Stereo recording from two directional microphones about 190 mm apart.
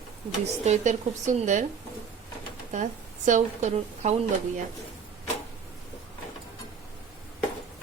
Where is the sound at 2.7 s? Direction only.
40° right (ahead or behind).